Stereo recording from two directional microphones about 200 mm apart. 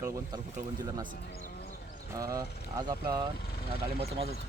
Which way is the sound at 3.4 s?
50° left (ahead or behind).